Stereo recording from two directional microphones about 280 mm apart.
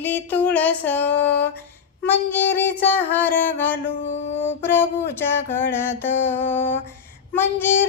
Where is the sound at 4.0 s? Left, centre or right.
Left.